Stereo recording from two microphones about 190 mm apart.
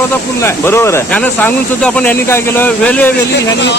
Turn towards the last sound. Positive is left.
turn(degrees=5)  # may be behind; listen again after turning